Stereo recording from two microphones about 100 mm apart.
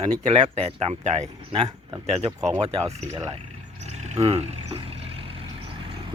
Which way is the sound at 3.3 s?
90° right.